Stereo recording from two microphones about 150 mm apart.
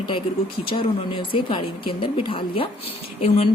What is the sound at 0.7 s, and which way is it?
Speech, 35° left (ahead or behind).